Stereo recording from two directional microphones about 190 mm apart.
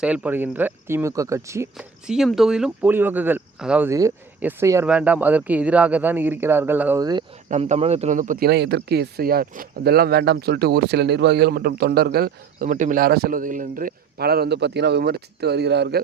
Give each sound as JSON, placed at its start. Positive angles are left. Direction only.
{"t": 0.0, "sound": "speech", "side_deg": -5}
{"t": 1.7, "sound": "speech", "side_deg": -5}
{"t": 7.0, "sound": "speech", "side_deg": -20}
{"t": 7.4, "sound": "speech", "side_deg": -40}
{"t": 8.4, "sound": "speech", "side_deg": -60}